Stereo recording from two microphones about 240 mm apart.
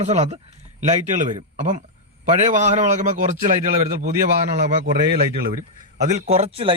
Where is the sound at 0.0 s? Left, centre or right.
Right.